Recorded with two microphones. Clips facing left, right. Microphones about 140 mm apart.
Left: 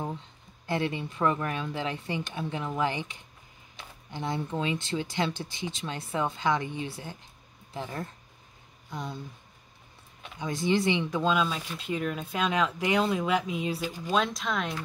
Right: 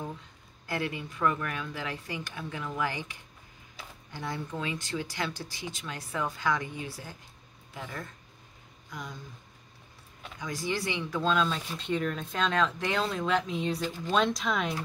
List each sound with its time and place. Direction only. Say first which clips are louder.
0.7 s speech: left 4 dB; 25° left (ahead or behind)
10.4 s speech: left 6 dB; 25° left (ahead or behind); by 14.8 s centre (ahead or behind)